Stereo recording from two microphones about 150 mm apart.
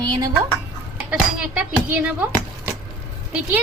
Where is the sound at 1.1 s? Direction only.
10° right (ahead or behind).